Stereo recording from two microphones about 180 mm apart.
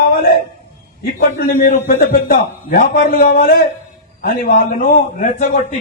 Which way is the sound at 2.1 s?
50° left (ahead or behind).